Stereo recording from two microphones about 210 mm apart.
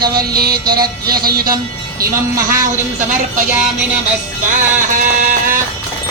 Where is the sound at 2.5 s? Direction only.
35° right (ahead or behind).